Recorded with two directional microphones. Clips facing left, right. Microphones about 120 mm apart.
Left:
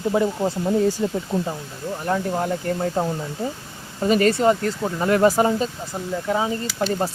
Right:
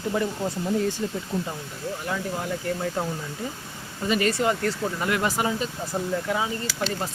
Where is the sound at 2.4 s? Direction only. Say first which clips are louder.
Left 5 dB; 40° left (ahead or behind).